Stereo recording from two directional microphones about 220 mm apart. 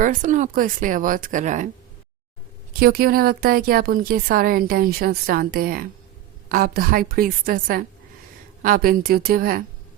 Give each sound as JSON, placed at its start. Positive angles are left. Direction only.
{"t": 0.0, "sound": "speech", "side_deg": -35}
{"t": 2.7, "sound": "speech", "side_deg": -40}